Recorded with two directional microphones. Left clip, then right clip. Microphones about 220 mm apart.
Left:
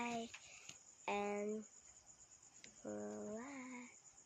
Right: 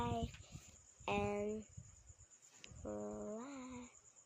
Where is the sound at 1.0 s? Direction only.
15° right (ahead or behind).